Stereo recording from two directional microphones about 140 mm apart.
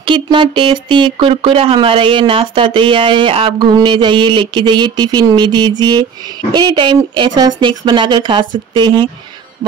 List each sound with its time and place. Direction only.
0.0 s speech: 35° right (ahead or behind)